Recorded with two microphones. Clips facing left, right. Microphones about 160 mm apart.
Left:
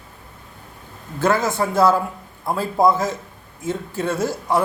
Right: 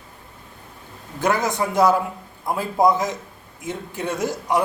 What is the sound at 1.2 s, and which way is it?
A man's voice, 15° right (ahead or behind).